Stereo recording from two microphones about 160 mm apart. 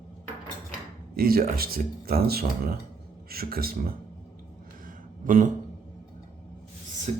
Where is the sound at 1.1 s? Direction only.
65° right (ahead or behind).